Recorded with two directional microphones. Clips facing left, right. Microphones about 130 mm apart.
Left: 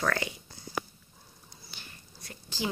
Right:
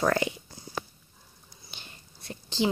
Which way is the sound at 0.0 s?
25° right (ahead or behind).